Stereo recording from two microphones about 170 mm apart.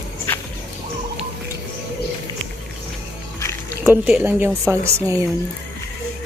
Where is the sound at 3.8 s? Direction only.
10° right (ahead or behind).